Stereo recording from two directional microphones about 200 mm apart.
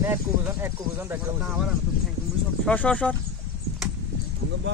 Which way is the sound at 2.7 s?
5° left (ahead or behind).